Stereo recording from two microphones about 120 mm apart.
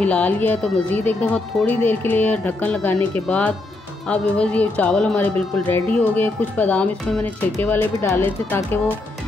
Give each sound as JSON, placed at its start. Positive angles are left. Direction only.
{"t": 0.0, "sound": "speech", "side_deg": 10}